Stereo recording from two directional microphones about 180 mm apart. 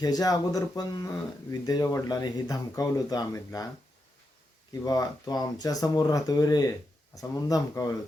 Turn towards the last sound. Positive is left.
turn(degrees=20)  # may be behind; listen again after turning